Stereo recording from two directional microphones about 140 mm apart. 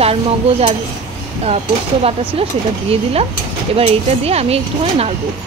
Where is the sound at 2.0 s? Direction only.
45° right (ahead or behind).